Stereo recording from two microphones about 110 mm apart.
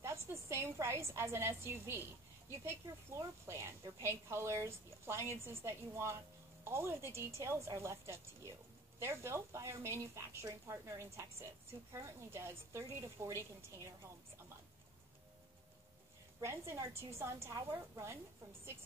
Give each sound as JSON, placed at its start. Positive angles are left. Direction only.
{"t": 0.0, "sound": "a woman's voice", "side_deg": -25}
{"t": 16.3, "sound": "a woman's voice", "side_deg": -25}